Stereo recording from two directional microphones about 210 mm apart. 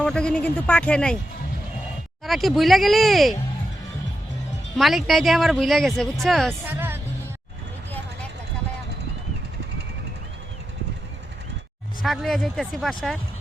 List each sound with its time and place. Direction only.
0.0 s speech: 5° left (ahead or behind)
2.2 s speech: centre (ahead or behind)
4.8 s speech: centre (ahead or behind)
6.7 s music: 10° right (ahead or behind)
12.0 s speech: centre (ahead or behind)